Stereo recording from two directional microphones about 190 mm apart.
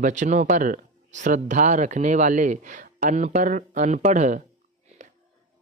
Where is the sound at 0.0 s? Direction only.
40° right (ahead or behind).